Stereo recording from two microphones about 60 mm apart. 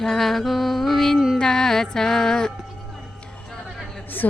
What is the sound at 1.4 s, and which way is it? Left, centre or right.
Music, centre.